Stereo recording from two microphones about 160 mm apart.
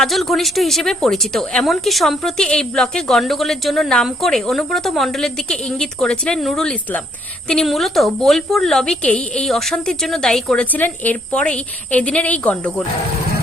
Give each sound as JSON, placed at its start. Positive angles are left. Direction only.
{"t": 0.0, "sound": "a woman's voice", "side_deg": 0}